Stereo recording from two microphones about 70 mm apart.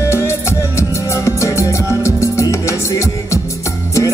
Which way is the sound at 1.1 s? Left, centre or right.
Left.